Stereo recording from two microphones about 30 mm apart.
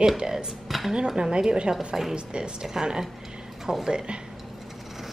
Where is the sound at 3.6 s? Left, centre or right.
Centre.